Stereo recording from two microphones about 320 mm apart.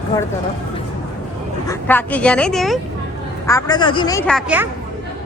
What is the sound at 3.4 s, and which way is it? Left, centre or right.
A woman's voice, centre.